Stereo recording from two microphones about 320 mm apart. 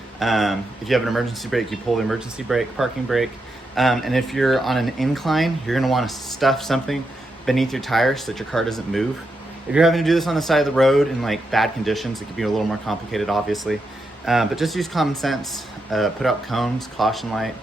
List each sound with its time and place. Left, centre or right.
0.2 s a man's voice: centre